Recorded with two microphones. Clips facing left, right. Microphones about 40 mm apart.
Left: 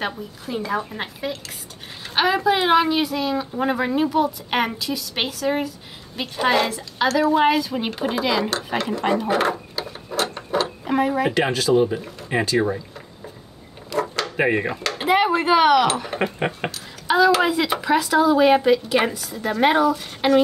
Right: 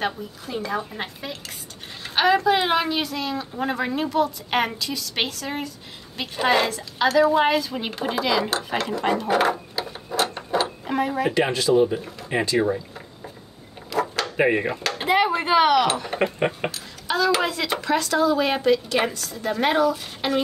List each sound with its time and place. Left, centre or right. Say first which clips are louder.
0.0 s a woman's voice: even; centre
11.5 s speech: left 1 dB; left
11.9 s a woman's voice: left 1 dB; centre
13.9 s drawer open or close: even; centre
14.3 s a woman's voice: even; centre